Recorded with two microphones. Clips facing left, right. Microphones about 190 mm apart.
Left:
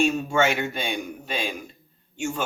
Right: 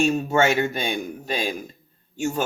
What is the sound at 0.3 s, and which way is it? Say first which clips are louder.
Speech: right 3 dB; 40° right (ahead or behind).